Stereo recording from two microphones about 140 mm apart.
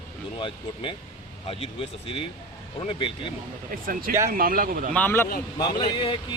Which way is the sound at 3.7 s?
90° right.